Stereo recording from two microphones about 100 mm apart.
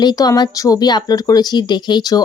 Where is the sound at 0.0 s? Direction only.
40° left (ahead or behind).